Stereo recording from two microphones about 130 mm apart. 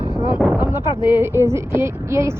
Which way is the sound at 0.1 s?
35° left (ahead or behind).